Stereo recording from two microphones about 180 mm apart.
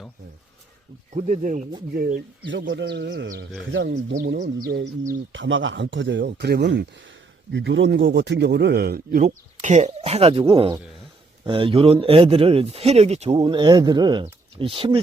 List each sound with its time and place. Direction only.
1.1 s speech: 45° right (ahead or behind)
2.5 s speech: 85° right
5.3 s speech: 90° right; by 9.3 s 55° right (ahead or behind)
9.6 s speech: 40° right (ahead or behind)